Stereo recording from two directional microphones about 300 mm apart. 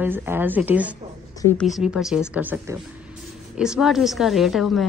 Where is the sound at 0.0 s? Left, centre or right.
Centre.